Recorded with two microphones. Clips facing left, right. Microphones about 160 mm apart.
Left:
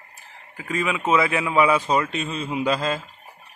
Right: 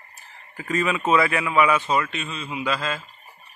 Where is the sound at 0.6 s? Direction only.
10° left (ahead or behind); by 3.0 s 40° left (ahead or behind).